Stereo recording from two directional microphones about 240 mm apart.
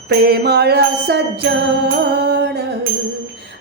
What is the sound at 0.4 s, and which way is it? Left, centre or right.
Music, right.